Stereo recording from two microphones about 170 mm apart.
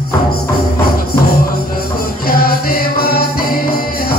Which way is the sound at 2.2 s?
60° left (ahead or behind).